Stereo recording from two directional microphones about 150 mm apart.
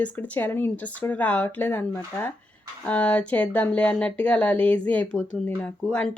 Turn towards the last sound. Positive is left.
turn(degrees=5)  # may be behind; listen again after turning